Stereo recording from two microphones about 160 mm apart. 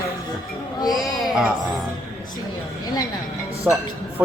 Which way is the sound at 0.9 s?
Centre (ahead or behind).